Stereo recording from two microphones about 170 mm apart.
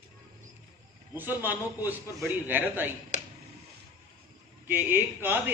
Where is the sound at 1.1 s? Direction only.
10° right (ahead or behind).